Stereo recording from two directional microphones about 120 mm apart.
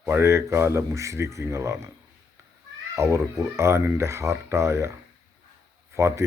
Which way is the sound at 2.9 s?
25° right (ahead or behind).